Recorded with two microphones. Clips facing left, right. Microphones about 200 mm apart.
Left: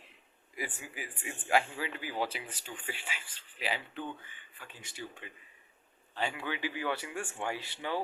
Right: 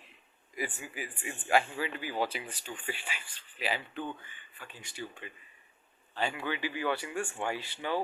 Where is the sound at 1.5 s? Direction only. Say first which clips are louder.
Right 2 dB; 20° left (ahead or behind).